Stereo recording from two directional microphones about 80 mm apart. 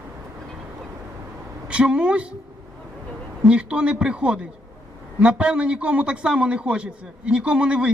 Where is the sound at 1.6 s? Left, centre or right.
Centre.